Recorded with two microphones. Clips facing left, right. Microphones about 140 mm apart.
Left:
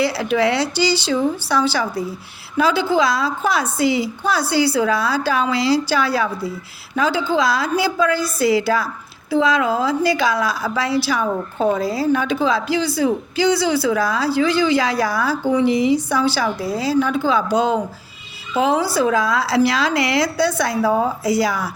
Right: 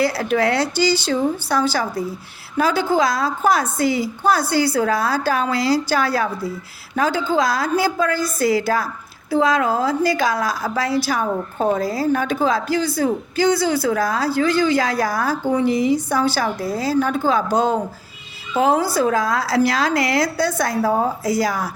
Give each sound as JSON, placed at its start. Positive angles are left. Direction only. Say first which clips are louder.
{"t": 0.0, "sound": "a woman's voice", "louder": "left 1 dB", "side_deg": -45}